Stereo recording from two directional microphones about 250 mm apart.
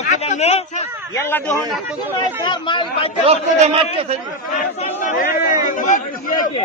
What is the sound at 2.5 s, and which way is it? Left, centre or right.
Speech, centre.